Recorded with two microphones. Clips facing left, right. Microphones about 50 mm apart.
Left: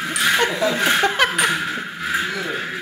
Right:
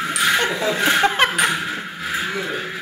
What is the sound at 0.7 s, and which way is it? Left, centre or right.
Speech, centre.